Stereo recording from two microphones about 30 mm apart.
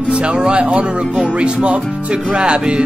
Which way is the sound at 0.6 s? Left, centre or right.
Right.